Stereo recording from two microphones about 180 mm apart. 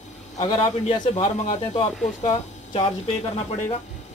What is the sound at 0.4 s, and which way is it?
Speech, 30° left (ahead or behind).